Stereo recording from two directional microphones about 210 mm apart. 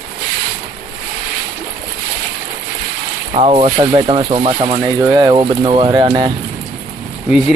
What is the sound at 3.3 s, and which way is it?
Speech, 25° right (ahead or behind).